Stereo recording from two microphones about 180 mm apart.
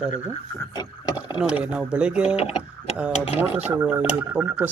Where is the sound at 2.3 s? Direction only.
35° left (ahead or behind).